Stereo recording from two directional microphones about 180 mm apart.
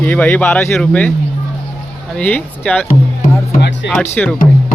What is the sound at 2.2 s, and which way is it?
Speech, 5° left (ahead or behind).